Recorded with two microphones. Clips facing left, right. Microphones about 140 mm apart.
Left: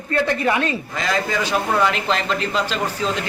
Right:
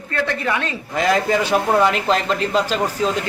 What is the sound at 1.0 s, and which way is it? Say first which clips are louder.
Speech: right 6 dB; 55° right (ahead or behind).